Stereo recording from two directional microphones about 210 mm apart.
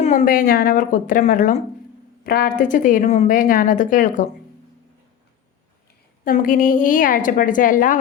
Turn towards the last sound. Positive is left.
turn(degrees=40)  # may be behind; listen again after turning